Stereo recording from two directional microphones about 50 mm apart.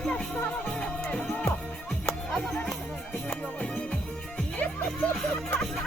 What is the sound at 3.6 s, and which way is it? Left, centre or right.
Music, left.